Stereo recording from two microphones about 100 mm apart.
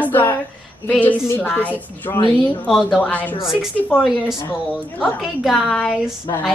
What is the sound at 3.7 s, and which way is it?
Speech, 15° left (ahead or behind).